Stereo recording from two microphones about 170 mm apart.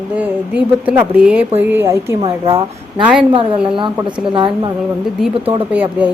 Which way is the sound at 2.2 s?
30° right (ahead or behind).